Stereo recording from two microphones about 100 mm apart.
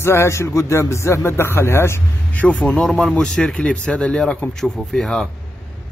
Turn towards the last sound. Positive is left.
turn(degrees=5)  # may be behind; listen again after turning